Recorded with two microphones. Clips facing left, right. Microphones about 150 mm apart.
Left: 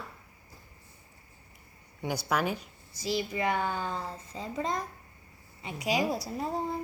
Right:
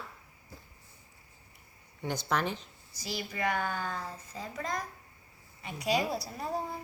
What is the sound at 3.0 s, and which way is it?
A woman's voice, 25° left (ahead or behind).